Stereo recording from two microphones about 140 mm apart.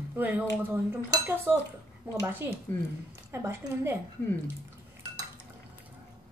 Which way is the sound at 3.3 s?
20° right (ahead or behind).